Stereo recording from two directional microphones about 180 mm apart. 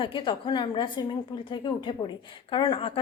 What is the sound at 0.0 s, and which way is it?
A woman's voice, 25° left (ahead or behind).